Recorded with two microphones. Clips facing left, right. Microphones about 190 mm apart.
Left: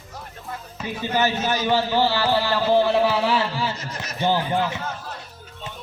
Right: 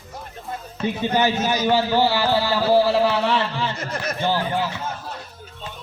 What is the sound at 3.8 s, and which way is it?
Speech, 55° right (ahead or behind).